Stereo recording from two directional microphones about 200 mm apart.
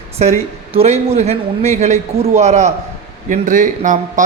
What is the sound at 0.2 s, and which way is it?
A man's voice, 30° right (ahead or behind).